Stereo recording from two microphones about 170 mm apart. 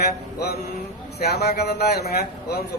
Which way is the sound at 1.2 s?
70° left (ahead or behind).